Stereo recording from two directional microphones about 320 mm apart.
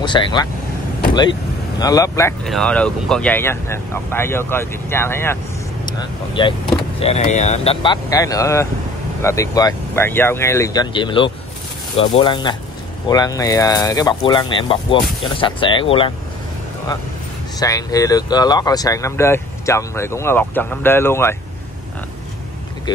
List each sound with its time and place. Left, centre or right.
0.0 s speech: centre
1.8 s speech: centre
17.6 s speech: centre
22.9 s speech: centre